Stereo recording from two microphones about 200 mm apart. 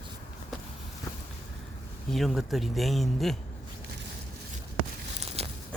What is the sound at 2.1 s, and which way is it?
Speech, centre (ahead or behind).